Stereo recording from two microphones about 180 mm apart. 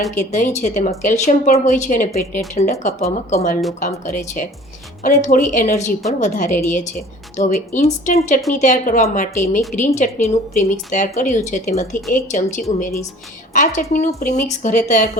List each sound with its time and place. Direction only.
0.2 s speech: 45° left (ahead or behind)